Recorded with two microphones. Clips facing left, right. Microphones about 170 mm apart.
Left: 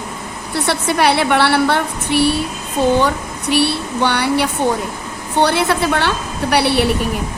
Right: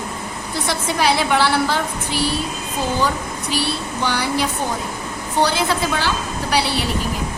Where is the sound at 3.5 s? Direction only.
65° left (ahead or behind).